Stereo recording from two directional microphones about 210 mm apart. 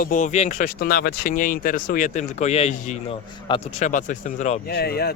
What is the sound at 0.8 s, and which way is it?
Speech, 45° left (ahead or behind).